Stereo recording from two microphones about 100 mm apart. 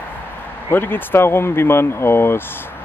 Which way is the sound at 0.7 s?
20° left (ahead or behind).